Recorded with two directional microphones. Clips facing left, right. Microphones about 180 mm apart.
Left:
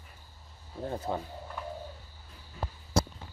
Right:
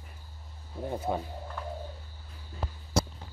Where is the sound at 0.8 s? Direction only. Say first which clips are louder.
Right 2 dB; 10° right (ahead or behind).